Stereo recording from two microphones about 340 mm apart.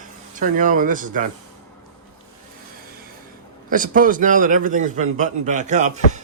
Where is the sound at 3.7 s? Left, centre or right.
Right.